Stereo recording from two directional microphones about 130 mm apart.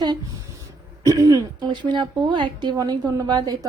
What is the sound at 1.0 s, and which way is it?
A woman's voice, 30° right (ahead or behind).